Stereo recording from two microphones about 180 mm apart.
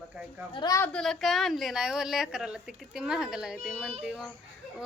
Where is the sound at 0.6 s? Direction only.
20° left (ahead or behind).